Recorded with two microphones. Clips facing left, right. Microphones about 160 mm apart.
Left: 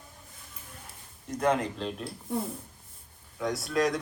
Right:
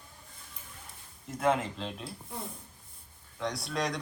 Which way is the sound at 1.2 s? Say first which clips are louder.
Left 2 dB; centre (ahead or behind).